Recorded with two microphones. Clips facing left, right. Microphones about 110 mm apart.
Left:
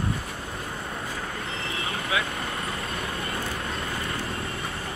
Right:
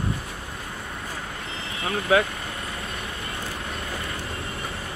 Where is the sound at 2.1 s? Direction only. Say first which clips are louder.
Right 9 dB; 45° right (ahead or behind).